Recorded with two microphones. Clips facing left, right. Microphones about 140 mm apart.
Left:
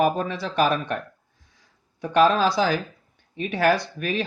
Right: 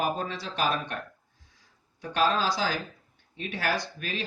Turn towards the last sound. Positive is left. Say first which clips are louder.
# left 9 dB
turn(degrees=55)  # may be behind; listen again after turning